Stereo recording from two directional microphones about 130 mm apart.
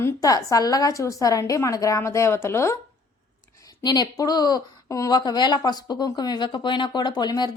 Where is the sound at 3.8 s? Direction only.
30° left (ahead or behind).